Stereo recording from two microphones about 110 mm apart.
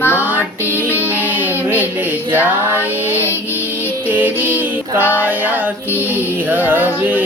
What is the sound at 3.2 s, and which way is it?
Speech, 20° left (ahead or behind).